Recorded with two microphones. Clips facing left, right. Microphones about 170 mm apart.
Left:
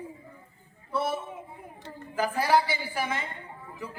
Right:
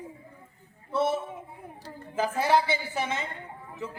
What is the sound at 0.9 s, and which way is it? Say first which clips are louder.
A woman's voice: right 3 dB; 25° right (ahead or behind).